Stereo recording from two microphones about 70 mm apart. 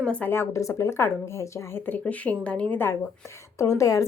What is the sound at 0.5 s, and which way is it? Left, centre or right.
Speech, left.